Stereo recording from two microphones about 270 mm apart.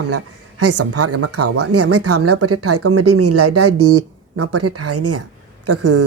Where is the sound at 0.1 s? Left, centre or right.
Right.